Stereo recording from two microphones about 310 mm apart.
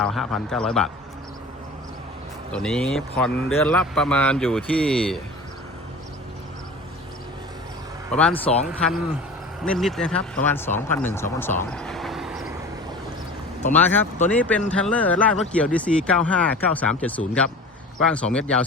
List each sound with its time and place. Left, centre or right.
0.0 s speech: centre
2.5 s speech: centre
8.3 s speech: centre
9.6 s speech: centre
13.7 s speech: centre